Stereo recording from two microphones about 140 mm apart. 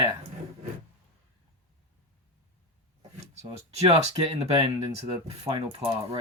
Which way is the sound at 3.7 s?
50° right (ahead or behind).